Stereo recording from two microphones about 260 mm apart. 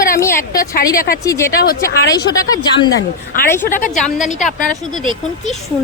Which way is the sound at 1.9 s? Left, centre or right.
Left.